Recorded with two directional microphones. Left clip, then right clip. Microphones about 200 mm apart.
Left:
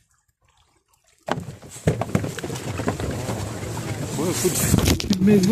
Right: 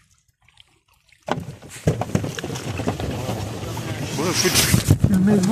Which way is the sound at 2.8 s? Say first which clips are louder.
Even; centre (ahead or behind).